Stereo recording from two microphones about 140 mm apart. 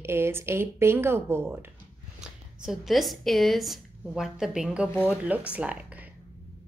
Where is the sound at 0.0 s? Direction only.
15° right (ahead or behind).